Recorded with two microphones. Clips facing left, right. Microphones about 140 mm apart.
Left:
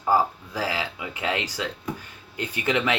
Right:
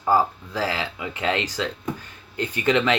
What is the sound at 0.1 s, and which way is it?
Speech, 10° left (ahead or behind).